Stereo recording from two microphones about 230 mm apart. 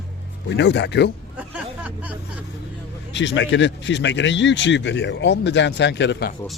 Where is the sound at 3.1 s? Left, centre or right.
Left.